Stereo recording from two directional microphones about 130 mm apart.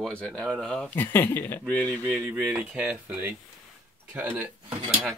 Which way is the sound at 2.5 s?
5° right (ahead or behind).